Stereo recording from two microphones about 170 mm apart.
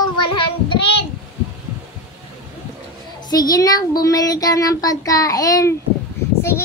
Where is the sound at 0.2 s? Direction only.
30° left (ahead or behind).